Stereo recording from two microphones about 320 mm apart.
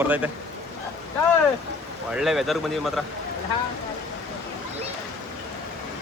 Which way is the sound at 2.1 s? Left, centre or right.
Centre.